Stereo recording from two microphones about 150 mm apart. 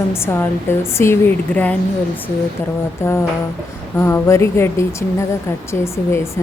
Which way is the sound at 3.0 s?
15° left (ahead or behind).